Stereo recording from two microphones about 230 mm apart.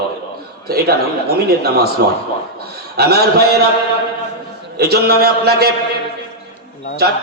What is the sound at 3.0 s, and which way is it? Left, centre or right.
Speech, right.